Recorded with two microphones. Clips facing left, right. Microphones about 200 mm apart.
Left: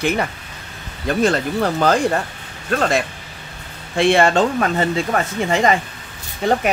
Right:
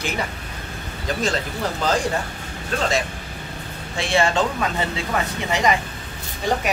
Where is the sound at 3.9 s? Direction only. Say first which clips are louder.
Left 6 dB; 55° left (ahead or behind).